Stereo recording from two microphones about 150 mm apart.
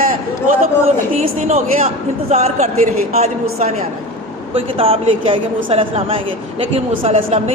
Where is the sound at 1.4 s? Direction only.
50° right (ahead or behind).